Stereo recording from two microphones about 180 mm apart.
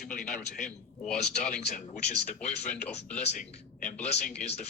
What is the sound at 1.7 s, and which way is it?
Speech, 45° left (ahead or behind).